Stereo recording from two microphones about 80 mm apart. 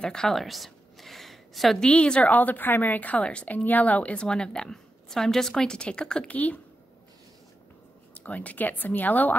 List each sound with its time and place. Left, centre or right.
0.0 s a sound: centre
1.9 s a woman's voice: centre
8.1 s speech: centre